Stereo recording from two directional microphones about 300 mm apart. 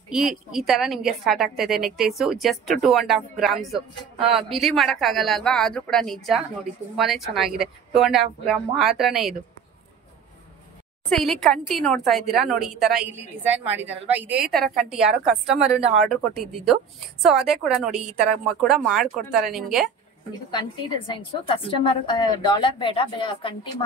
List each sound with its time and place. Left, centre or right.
0.1 s a woman's voice: centre
11.1 s a woman's voice: centre
21.1 s a woman's voice: centre